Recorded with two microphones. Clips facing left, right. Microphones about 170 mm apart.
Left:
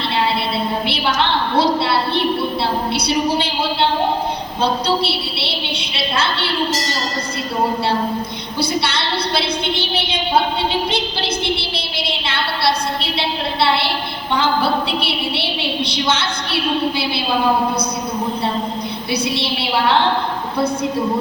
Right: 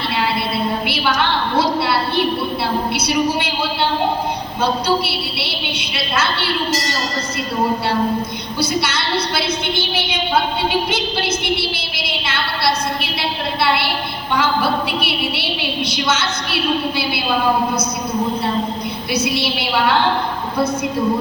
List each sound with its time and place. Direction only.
2.9 s a woman's voice: 30° left (ahead or behind)
8.8 s a woman's voice: 30° left (ahead or behind)
12.0 s a sound: 30° left (ahead or behind)
16.0 s a woman's voice: 30° left (ahead or behind)
19.1 s a woman's voice: 30° left (ahead or behind)